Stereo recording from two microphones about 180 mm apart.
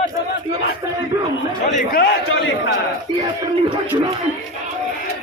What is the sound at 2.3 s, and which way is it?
Speech, 75° left (ahead or behind).